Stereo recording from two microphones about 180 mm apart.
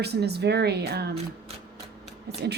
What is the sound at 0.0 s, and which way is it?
A woman's voice, 65° right (ahead or behind).